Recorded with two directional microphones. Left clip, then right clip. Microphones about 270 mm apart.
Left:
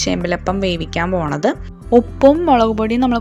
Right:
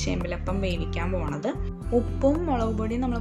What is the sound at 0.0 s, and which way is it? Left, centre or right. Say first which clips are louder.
Speech: left 12 dB; left.